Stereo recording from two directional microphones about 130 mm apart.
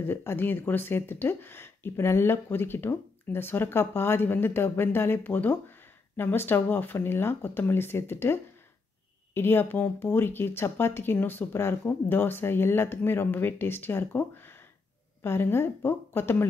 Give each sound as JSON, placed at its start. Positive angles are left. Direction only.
{"t": 0.0, "sound": "speech", "side_deg": 20}